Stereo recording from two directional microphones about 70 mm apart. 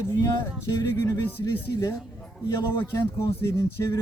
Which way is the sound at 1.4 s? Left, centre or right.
Left.